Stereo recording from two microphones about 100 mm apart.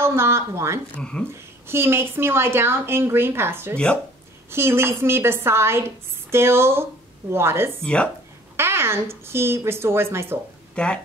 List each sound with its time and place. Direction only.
0.0 s a woman's voice: 25° right (ahead or behind)
0.9 s speech: 10° left (ahead or behind)
1.7 s a woman's voice: 25° right (ahead or behind)
3.7 s speech: 10° left (ahead or behind)
4.5 s a woman's voice: 25° right (ahead or behind)
7.8 s speech: 10° left (ahead or behind)
8.5 s a woman's voice: 25° right (ahead or behind)
10.7 s speech: 10° left (ahead or behind)